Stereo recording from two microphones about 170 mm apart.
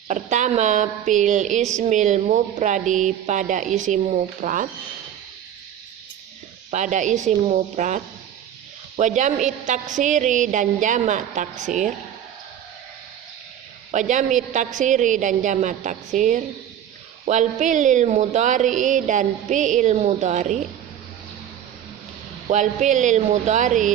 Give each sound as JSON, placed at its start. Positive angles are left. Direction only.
{"t": 0.1, "sound": "a woman's voice", "side_deg": -45}
{"t": 6.7, "sound": "a woman's voice", "side_deg": -45}
{"t": 13.9, "sound": "a woman's voice", "side_deg": -45}
{"t": 22.4, "sound": "a woman's voice", "side_deg": -45}